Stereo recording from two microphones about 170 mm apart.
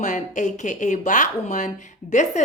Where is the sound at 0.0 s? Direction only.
45° left (ahead or behind).